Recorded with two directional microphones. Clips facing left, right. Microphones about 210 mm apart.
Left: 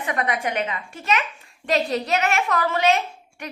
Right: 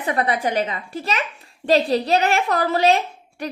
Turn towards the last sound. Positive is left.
turn(degrees=-35)  # may be behind; listen again after turning